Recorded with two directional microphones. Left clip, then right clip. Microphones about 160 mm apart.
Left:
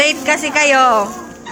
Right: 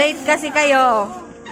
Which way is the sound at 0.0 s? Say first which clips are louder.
Left 2 dB; centre (ahead or behind).